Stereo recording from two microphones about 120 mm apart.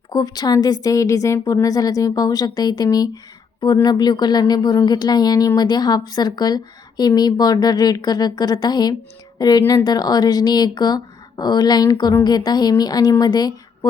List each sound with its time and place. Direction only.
0.1 s speech: 35° left (ahead or behind)